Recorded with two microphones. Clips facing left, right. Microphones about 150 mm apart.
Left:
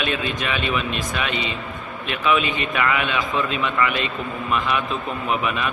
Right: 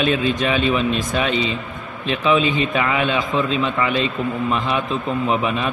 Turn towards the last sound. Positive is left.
turn(degrees=-30)  # may be behind; listen again after turning